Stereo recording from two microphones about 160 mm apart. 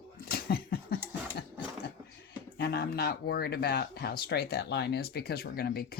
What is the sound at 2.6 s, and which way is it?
Speech, 80° left.